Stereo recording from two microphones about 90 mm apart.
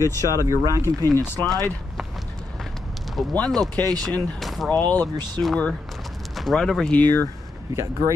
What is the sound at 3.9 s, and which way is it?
Speech, 45° right (ahead or behind).